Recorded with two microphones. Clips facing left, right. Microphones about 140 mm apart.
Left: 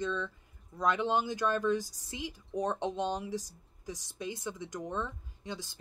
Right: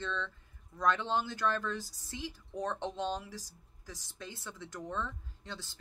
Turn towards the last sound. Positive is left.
turn(degrees=15)  # may be behind; listen again after turning